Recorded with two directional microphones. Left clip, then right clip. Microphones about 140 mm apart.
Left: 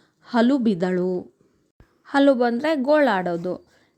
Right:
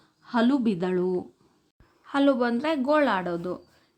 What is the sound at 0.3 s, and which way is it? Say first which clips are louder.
A woman's voice: left 4 dB; 35° left (ahead or behind).